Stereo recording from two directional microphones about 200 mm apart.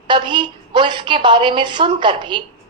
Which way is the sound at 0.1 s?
25° right (ahead or behind).